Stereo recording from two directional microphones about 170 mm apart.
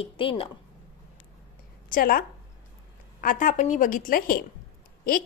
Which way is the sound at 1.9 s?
60° left (ahead or behind).